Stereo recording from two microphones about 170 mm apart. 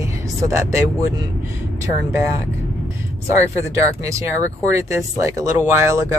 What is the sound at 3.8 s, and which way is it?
Speech, 20° right (ahead or behind).